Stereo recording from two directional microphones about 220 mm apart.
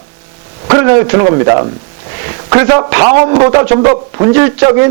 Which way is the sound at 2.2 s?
20° right (ahead or behind).